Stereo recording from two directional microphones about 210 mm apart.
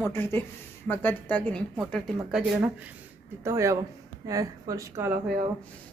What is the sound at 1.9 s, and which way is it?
A woman's voice, 5° right (ahead or behind).